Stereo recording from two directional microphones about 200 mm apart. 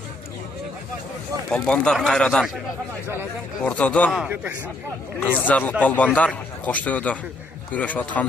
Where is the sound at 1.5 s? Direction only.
5° left (ahead or behind).